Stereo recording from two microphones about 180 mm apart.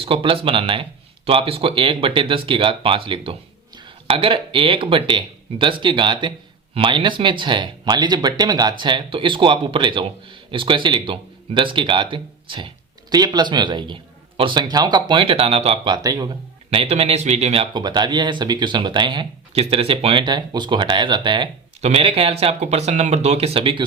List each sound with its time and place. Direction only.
0.0 s speech: 30° right (ahead or behind)
16.6 s speech: 35° right (ahead or behind)